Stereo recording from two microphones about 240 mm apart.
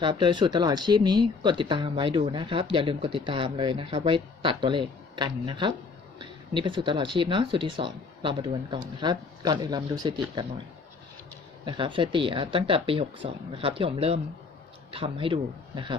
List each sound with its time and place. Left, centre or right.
0.0 s speech: centre
11.6 s speech: centre